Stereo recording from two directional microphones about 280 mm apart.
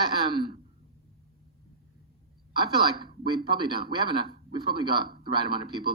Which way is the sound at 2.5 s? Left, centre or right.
Centre.